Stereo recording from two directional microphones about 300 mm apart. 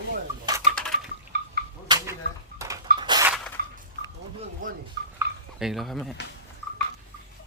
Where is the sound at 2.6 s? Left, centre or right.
Centre.